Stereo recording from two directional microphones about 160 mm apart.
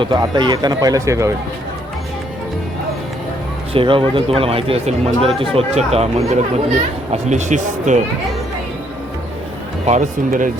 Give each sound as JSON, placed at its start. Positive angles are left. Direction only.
{"t": 0.0, "sound": "speech", "side_deg": -30}
{"t": 3.7, "sound": "speech", "side_deg": -35}
{"t": 9.8, "sound": "speech", "side_deg": -50}